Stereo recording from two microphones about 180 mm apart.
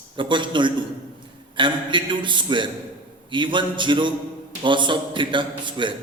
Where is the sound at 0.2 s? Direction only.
25° right (ahead or behind).